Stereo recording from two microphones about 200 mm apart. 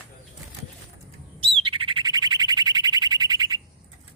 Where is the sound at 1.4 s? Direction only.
25° right (ahead or behind).